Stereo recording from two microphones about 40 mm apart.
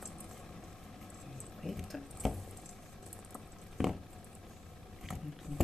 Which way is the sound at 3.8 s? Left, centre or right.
Centre.